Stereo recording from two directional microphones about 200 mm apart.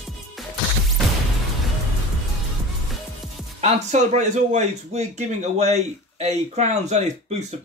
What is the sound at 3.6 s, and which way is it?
Speech, 35° right (ahead or behind).